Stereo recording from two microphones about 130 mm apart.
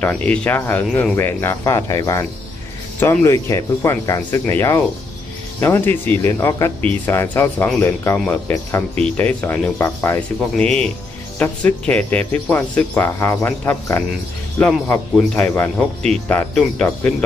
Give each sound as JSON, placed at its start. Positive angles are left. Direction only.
{"t": 0.0, "sound": "speech", "side_deg": 10}
{"t": 15.3, "sound": "speech", "side_deg": 15}